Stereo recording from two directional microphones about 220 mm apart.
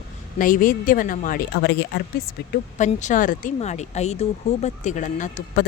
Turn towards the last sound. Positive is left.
turn(degrees=35)  # may be behind; listen again after turning